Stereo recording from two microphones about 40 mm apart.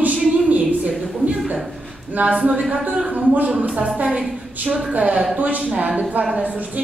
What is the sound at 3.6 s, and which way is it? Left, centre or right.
Speech, right.